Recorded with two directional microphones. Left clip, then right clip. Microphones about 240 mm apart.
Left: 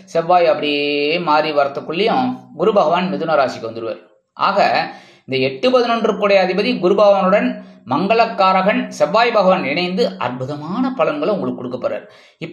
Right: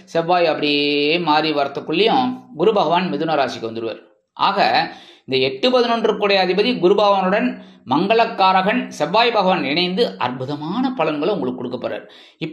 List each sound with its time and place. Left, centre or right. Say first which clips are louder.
0.1 s speech: left 3 dB; centre
0.7 s mantra: even; centre
1.1 s speech: left 2 dB; centre